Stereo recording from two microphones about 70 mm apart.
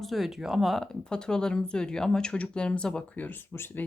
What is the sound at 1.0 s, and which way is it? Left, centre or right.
Speech, centre.